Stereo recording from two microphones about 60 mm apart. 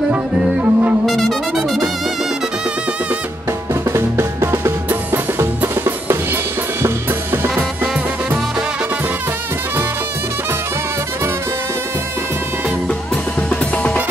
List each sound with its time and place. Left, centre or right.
0.1 s music: right
3.9 s music: right
7.4 s music: right